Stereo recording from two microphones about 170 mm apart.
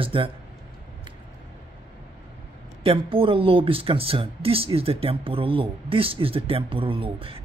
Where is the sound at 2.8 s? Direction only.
30° right (ahead or behind).